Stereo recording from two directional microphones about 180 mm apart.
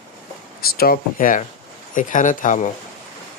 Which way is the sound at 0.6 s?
55° left (ahead or behind).